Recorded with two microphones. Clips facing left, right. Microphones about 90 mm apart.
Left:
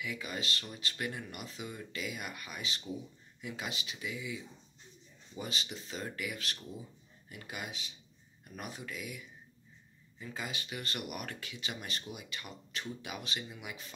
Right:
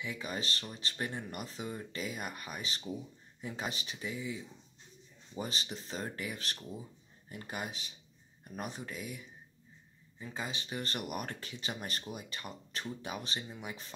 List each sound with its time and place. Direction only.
0.0 s speech: 35° right (ahead or behind)